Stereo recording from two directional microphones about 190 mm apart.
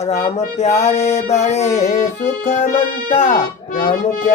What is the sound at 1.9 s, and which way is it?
Accordion, 35° left (ahead or behind).